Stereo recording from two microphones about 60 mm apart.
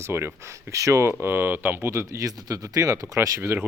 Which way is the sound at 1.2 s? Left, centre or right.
Right.